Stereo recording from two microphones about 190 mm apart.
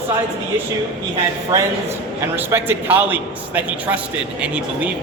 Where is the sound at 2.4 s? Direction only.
10° right (ahead or behind).